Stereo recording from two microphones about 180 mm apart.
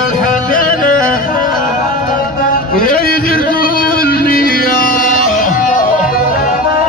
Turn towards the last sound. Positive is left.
turn(degrees=50)  # may be behind; listen again after turning